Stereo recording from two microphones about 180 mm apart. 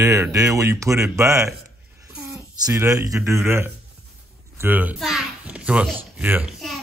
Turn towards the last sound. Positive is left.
turn(degrees=-10)  # may be behind; listen again after turning